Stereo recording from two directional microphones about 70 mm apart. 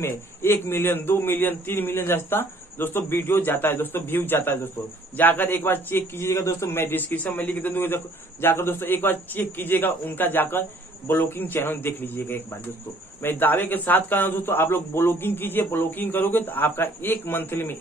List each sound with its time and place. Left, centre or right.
0.0 s a man's voice: left